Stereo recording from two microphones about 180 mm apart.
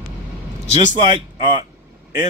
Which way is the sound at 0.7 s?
45° left (ahead or behind).